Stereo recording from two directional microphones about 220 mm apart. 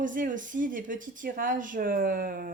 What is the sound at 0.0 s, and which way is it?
Speech, 35° right (ahead or behind).